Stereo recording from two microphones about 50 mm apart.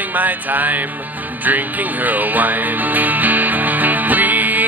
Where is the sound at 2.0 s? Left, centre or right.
Right.